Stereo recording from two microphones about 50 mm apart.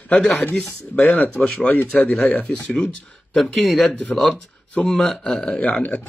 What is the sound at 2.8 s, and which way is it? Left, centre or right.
Speech, centre.